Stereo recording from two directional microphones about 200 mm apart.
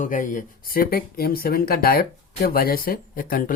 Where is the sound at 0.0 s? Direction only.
40° left (ahead or behind).